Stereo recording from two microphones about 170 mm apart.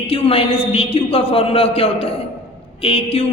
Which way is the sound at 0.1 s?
35° left (ahead or behind).